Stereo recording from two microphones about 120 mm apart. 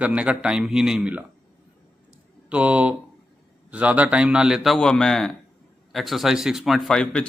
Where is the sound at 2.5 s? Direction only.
10° right (ahead or behind); by 7.2 s 5° left (ahead or behind).